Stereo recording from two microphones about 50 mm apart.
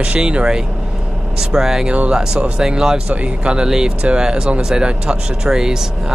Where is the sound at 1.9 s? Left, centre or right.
Right.